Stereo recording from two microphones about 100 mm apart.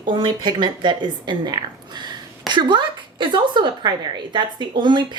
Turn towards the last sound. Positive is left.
turn(degrees=-50)  # may be behind; listen again after turning